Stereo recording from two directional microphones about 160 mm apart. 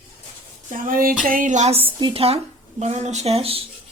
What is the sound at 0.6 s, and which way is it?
A woman's voice, 60° right (ahead or behind).